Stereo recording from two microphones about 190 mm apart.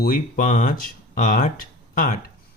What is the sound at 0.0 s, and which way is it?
Speech, 45° left (ahead or behind).